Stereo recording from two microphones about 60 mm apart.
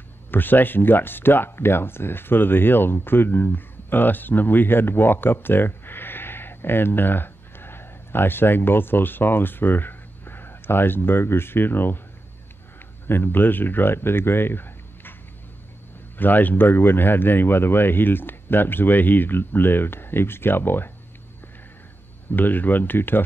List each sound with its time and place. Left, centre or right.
0.3 s speech: left
13.0 s speech: left
16.2 s speech: left
22.3 s speech: left